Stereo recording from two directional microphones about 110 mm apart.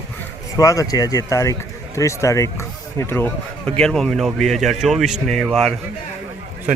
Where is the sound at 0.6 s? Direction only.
30° left (ahead or behind).